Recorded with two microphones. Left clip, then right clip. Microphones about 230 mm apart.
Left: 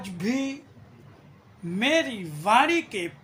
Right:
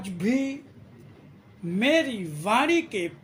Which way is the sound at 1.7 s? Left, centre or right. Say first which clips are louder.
Right 1 dB; centre.